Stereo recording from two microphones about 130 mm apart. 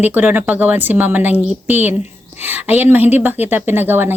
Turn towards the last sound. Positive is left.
turn(degrees=-15)  # may be behind; listen again after turning